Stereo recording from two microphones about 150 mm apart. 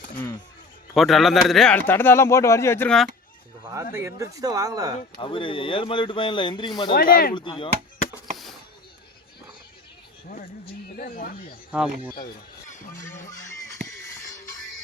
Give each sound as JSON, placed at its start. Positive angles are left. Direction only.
{"t": 0.9, "sound": "speech", "side_deg": 0}
{"t": 1.9, "sound": "speech", "side_deg": 15}
{"t": 3.9, "sound": "speech", "side_deg": -20}
{"t": 5.1, "sound": "speech", "side_deg": 35}
{"t": 6.9, "sound": "speech", "side_deg": 75}
{"t": 7.3, "sound": "speech", "side_deg": 30}
{"t": 10.2, "sound": "speech", "side_deg": 75}
{"t": 11.7, "sound": "speech", "side_deg": -5}
{"t": 12.1, "sound": "speech", "side_deg": 65}